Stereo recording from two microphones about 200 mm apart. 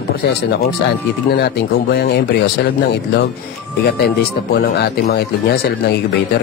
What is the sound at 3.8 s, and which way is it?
Speech, 55° left (ahead or behind).